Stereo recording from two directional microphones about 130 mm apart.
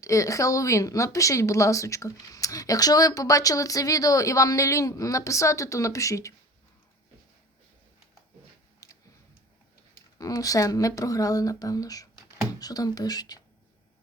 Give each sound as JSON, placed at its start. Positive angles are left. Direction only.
{"t": 0.0, "sound": "speech", "side_deg": 25}
{"t": 8.8, "sound": "a sound", "side_deg": 30}
{"t": 9.9, "sound": "speech", "side_deg": 30}